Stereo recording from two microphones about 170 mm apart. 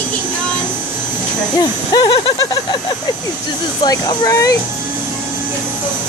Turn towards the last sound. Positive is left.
turn(degrees=20)  # may be behind; listen again after turning